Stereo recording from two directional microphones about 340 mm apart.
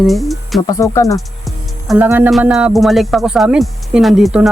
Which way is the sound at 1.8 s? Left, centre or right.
Centre.